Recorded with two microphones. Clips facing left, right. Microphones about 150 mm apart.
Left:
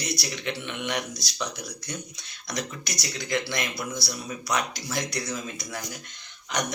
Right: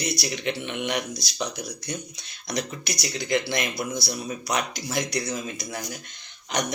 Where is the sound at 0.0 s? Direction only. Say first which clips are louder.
Right 3 dB; 20° right (ahead or behind).